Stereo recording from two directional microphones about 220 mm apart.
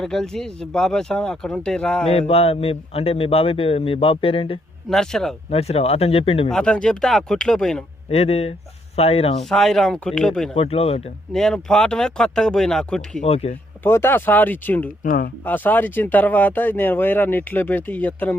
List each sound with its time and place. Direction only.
0.0 s speech: 5° left (ahead or behind)
2.0 s a man's voice: 25° left (ahead or behind)
4.9 s speech: centre (ahead or behind)
5.5 s a man's voice: 30° left (ahead or behind)
6.5 s speech: 5° left (ahead or behind)
8.1 s a man's voice: 30° left (ahead or behind)
9.4 s speech: centre (ahead or behind)
10.5 s a man's voice: 25° left (ahead or behind)
11.3 s speech: 5° left (ahead or behind)
13.2 s a man's voice: 30° left (ahead or behind)
13.8 s speech: 10° left (ahead or behind)
15.0 s speech: 40° left (ahead or behind)
15.4 s speech: 10° left (ahead or behind)